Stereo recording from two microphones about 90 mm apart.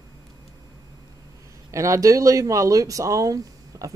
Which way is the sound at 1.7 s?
35° right (ahead or behind).